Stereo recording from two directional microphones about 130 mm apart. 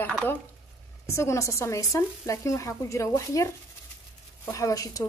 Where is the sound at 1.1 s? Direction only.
20° left (ahead or behind).